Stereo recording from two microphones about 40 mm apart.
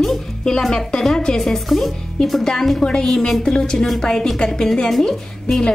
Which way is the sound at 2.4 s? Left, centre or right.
Centre.